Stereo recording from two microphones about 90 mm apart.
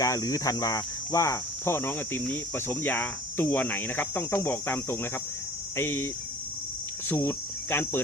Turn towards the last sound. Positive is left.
turn(degrees=25)  # may be behind; listen again after turning